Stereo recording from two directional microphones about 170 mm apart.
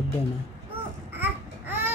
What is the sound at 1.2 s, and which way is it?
Baby cry, 10° right (ahead or behind).